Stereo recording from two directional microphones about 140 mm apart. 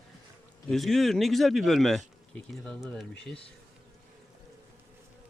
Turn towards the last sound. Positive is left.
turn(degrees=5)  # may be behind; listen again after turning